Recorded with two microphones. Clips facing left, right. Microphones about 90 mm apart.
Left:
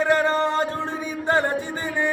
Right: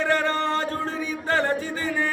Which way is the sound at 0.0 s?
10° left (ahead or behind).